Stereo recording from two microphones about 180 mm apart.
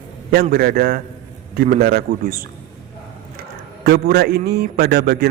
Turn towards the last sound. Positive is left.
turn(degrees=-65)  # may be behind; listen again after turning